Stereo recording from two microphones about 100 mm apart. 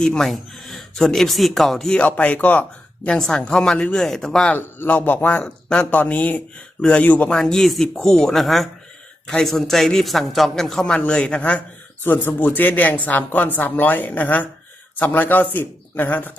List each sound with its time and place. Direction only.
0.0 s a man's voice: 5° left (ahead or behind)
4.5 s a man's voice: 20° left (ahead or behind)
7.3 s a man's voice: 5° left (ahead or behind)